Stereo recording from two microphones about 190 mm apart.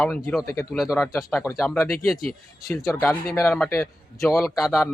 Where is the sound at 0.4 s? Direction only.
15° left (ahead or behind).